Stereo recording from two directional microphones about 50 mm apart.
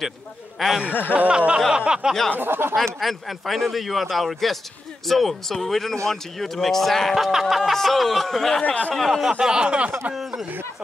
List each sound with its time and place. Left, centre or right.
0.8 s chuckle: left
1.1 s a sound: right
1.8 s speech: centre
2.3 s speech: right
3.0 s speech: centre
7.2 s speech: centre
8.6 s speech: left
8.9 s speech: centre
9.4 s speech: centre
10.1 s speech: centre